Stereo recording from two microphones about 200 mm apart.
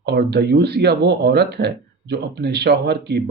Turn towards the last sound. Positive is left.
turn(degrees=-55)  # may be behind; listen again after turning